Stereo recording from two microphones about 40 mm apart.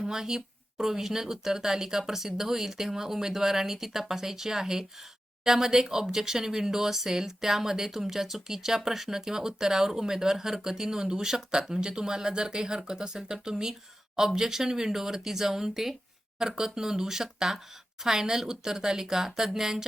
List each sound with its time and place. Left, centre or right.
0.0 s speech: centre